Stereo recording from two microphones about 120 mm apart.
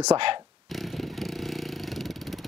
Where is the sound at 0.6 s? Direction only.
Centre (ahead or behind).